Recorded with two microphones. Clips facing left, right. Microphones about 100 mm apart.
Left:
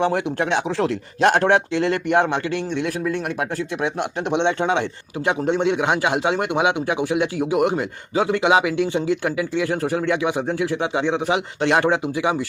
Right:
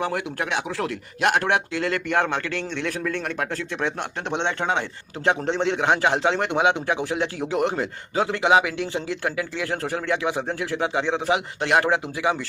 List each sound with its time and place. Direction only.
0.0 s a man's voice: 25° left (ahead or behind)